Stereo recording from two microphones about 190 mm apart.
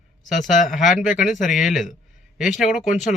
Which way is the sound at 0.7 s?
Centre (ahead or behind).